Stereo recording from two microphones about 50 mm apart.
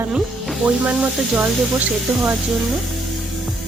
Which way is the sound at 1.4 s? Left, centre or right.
Right.